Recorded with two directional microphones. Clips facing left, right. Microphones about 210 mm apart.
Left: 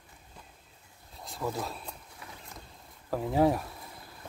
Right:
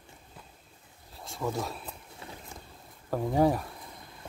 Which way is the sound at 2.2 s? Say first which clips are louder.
Right 4 dB; 25° right (ahead or behind).